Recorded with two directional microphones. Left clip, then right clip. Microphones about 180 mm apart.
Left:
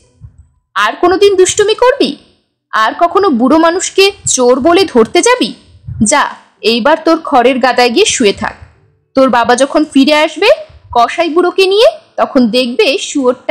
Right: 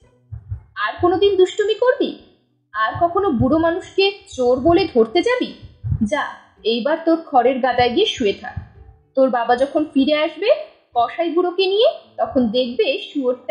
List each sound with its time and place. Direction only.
0.7 s speech: 50° left (ahead or behind)